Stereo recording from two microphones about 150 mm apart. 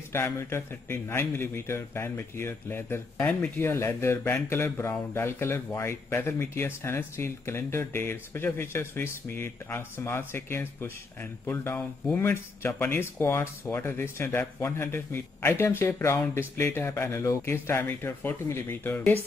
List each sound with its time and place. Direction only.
0.1 s a man's voice: 15° left (ahead or behind)